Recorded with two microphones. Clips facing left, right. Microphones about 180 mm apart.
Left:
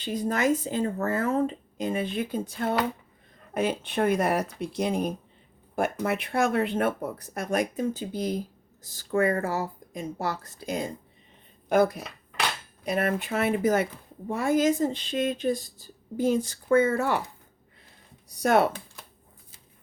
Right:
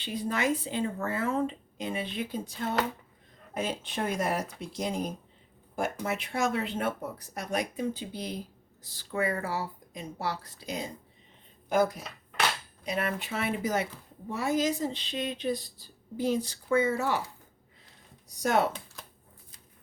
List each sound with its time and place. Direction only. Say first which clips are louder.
0.0 s speech: left 4 dB; 45° left (ahead or behind)
11.7 s speech: left 4 dB; 65° left (ahead or behind)
12.8 s speech: left 5 dB; 55° left (ahead or behind)